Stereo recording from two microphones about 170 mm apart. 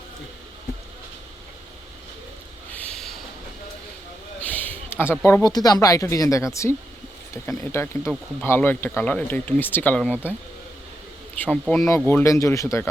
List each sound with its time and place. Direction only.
2.7 s snort: 5° left (ahead or behind)
4.4 s a sound: 10° left (ahead or behind)
5.2 s speech: 20° left (ahead or behind)
11.3 s speech: 5° left (ahead or behind)